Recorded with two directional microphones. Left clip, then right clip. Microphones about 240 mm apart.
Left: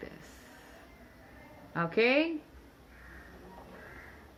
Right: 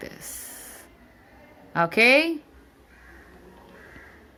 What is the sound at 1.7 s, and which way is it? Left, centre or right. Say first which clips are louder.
Speech: right 9 dB; right.